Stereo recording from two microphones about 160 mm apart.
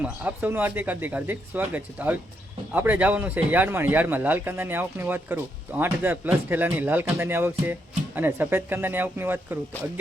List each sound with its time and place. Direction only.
0.0 s speech: 10° right (ahead or behind)